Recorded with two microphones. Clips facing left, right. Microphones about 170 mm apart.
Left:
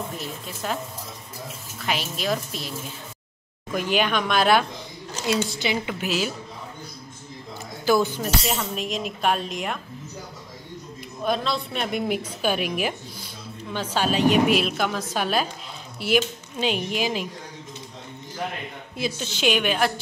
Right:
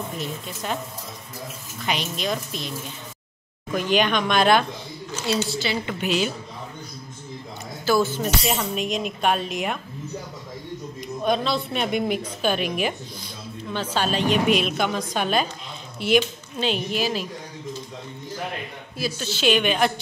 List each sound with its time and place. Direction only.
0.2 s a woman's voice: centre (ahead or behind)
1.9 s a woman's voice: 5° left (ahead or behind)
3.7 s a woman's voice: 10° left (ahead or behind)
5.5 s a woman's voice: 20° left (ahead or behind)
5.9 s a woman's voice: 5° left (ahead or behind)
7.8 s a woman's voice: 15° left (ahead or behind); by 9.8 s 5° right (ahead or behind)
11.2 s a woman's voice: centre (ahead or behind); by 17.3 s 15° left (ahead or behind)
18.9 s a woman's voice: 20° left (ahead or behind)